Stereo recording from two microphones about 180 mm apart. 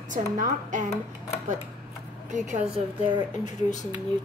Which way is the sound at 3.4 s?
40° left (ahead or behind).